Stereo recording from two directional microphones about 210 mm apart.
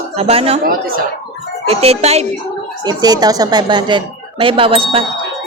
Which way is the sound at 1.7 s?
30° right (ahead or behind).